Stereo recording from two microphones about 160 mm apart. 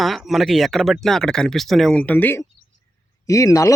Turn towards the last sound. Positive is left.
turn(degrees=20)  # may be behind; listen again after turning